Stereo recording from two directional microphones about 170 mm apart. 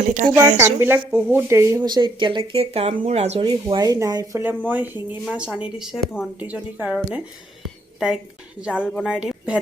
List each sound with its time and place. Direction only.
0.1 s a woman's voice: 45° right (ahead or behind)
0.6 s a woman's voice: 15° right (ahead or behind); by 3.4 s 40° right (ahead or behind)
3.4 s a woman's voice: 25° right (ahead or behind); by 7.2 s 5° right (ahead or behind)
7.6 s a sound: centre (ahead or behind)
8.6 s a woman's voice: 5° right (ahead or behind)